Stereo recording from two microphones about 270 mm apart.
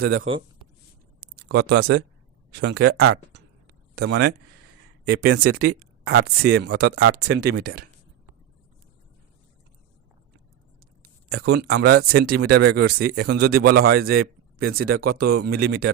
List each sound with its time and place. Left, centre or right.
0.0 s a man's voice: right
7.3 s speech: right
11.3 s a man's voice: right